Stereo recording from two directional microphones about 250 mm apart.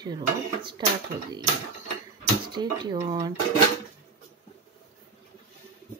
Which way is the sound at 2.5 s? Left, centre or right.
Centre.